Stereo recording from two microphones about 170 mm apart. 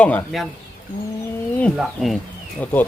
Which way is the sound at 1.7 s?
Centre (ahead or behind).